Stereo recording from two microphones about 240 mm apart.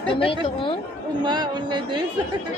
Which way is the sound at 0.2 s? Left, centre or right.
Left.